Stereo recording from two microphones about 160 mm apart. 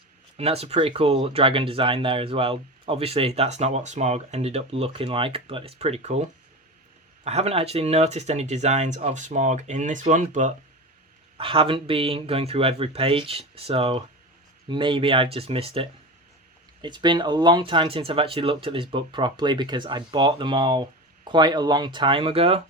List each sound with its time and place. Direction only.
0.3 s speech: 40° right (ahead or behind)
7.3 s speech: 40° right (ahead or behind)
11.3 s speech: 35° right (ahead or behind)